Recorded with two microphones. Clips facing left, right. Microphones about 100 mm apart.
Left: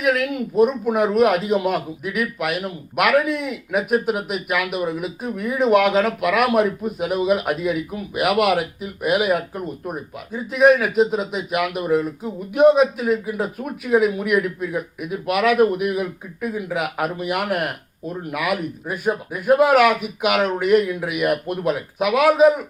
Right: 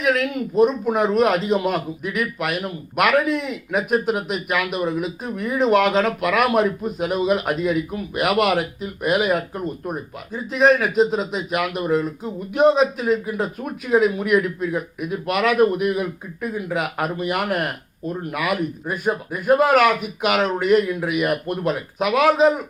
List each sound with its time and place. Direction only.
0.0 s a man's voice: 10° left (ahead or behind)